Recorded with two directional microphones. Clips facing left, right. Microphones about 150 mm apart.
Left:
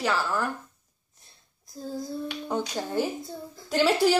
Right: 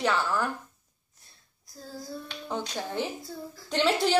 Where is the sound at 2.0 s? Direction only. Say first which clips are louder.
Left 5 dB; 15° left (ahead or behind).